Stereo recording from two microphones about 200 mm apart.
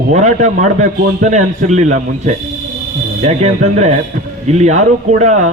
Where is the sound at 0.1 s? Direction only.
35° right (ahead or behind).